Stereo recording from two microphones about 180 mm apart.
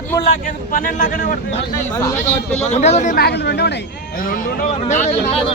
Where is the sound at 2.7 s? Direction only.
40° left (ahead or behind).